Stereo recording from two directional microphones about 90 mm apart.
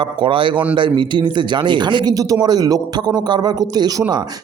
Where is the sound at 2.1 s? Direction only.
40° right (ahead or behind).